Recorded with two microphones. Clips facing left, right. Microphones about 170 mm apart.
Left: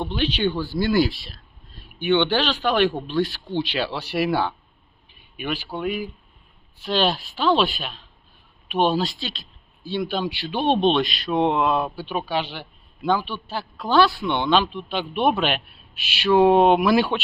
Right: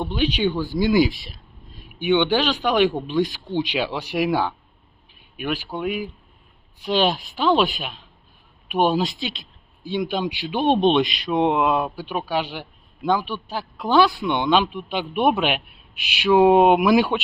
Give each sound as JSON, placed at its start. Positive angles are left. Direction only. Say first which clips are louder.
{"t": 0.0, "sound": "speech", "louder": "right 1 dB", "side_deg": -10}